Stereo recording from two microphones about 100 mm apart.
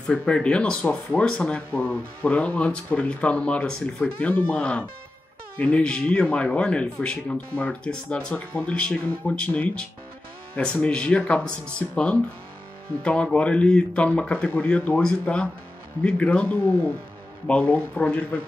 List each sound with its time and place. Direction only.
0.1 s speech: 10° left (ahead or behind)